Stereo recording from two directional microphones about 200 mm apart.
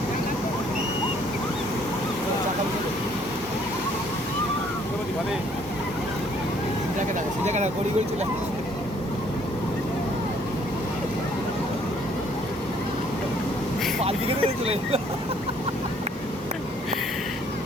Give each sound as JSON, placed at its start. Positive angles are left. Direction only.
{"t": 7.4, "sound": "speech", "side_deg": -35}
{"t": 14.0, "sound": "speech", "side_deg": -30}